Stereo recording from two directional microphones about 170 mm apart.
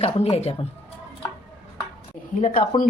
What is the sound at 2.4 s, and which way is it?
Speech, 45° left (ahead or behind).